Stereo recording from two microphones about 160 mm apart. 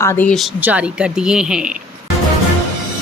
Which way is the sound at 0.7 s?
5° right (ahead or behind).